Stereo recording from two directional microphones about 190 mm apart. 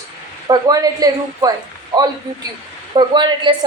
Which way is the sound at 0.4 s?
20° right (ahead or behind).